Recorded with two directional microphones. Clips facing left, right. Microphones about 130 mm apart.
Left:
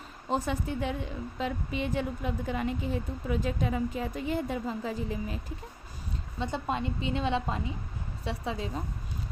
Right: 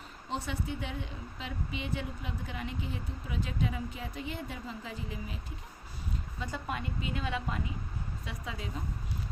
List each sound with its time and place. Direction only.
0.3 s speech: 45° left (ahead or behind)
6.4 s a woman's voice: 25° left (ahead or behind)